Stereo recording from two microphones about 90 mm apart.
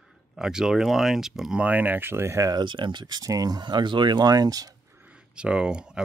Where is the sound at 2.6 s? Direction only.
60° right (ahead or behind); by 4.6 s 45° right (ahead or behind).